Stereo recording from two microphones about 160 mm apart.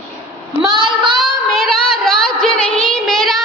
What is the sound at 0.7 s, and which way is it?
Child singing, 30° right (ahead or behind).